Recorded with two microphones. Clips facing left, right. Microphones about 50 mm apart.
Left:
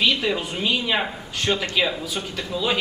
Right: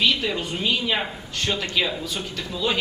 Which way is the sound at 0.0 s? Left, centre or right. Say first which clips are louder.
Left 1 dB; centre.